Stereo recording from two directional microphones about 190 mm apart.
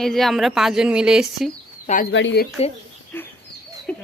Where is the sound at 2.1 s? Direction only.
70° left (ahead or behind).